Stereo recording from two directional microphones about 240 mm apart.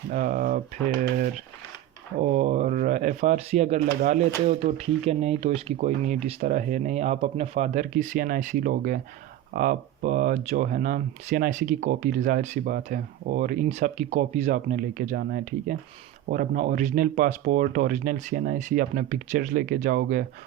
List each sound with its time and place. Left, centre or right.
0.1 s speech: right
2.2 s speech: right